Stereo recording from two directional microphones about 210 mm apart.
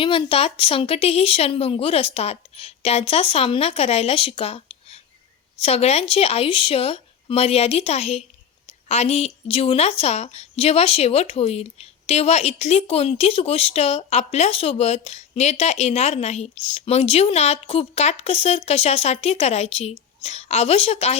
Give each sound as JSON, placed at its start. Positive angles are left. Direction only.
{"t": 0.0, "sound": "a woman's voice", "side_deg": 25}